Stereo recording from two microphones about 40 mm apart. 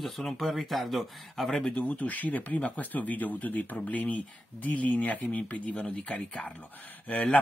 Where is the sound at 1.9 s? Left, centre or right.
Left.